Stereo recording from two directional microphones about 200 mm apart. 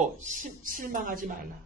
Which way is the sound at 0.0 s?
40° right (ahead or behind).